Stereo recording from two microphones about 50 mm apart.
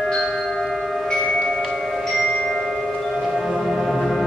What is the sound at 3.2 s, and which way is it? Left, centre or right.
Music, centre.